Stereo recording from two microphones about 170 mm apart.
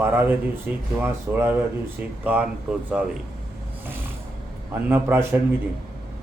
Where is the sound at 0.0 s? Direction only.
10° right (ahead or behind).